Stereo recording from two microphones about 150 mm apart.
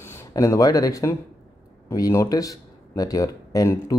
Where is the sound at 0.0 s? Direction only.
20° left (ahead or behind).